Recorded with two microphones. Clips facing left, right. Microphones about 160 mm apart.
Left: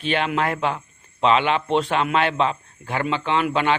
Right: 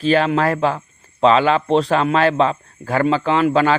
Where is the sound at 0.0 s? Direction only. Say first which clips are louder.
Right 6 dB; 35° right (ahead or behind).